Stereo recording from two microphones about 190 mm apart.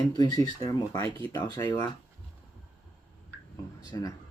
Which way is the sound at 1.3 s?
20° left (ahead or behind).